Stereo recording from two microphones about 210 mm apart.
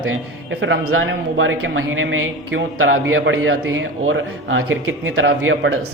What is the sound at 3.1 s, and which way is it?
A man's voice, 65° right (ahead or behind).